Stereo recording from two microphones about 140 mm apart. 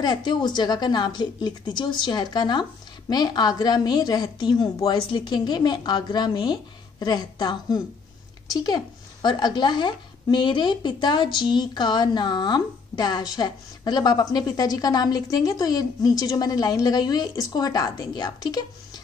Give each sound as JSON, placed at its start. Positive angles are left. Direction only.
{"t": 0.0, "sound": "a woman's voice", "side_deg": 30}